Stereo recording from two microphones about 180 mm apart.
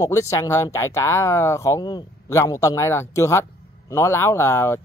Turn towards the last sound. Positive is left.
turn(degrees=15)  # may be behind; listen again after turning